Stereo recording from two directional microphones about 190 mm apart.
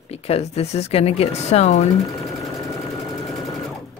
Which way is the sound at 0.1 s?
35° left (ahead or behind).